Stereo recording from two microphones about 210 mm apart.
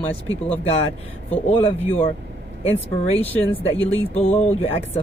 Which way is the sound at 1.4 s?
25° left (ahead or behind).